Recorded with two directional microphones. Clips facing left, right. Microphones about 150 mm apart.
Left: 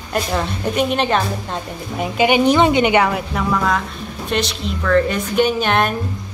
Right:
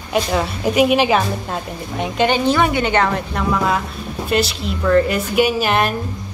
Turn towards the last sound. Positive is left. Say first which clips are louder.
# even
turn(degrees=-5)  # may be behind; listen again after turning